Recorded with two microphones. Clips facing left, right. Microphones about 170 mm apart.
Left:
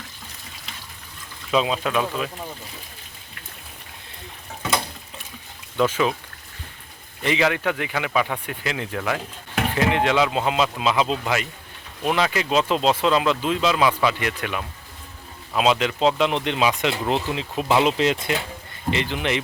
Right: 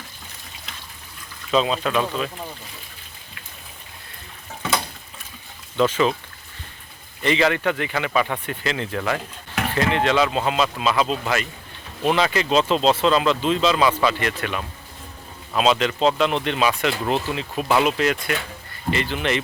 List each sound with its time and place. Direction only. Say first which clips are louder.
1.5 s speech: right 1 dB; 10° left (ahead or behind)
5.7 s speech: right 2 dB; 10° left (ahead or behind)
7.3 s speech: right 2 dB; 10° left (ahead or behind)